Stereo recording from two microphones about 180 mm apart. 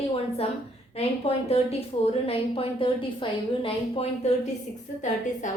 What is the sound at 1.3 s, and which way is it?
A woman's voice, 35° left (ahead or behind).